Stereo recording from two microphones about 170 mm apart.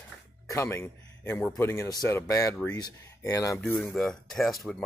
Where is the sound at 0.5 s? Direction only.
15° left (ahead or behind).